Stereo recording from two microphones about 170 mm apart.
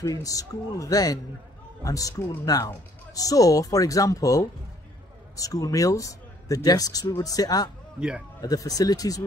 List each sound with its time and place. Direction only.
0.0 s speech: 20° left (ahead or behind)